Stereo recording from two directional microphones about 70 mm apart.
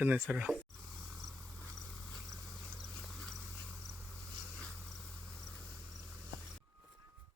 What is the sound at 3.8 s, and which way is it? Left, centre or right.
Insect, centre.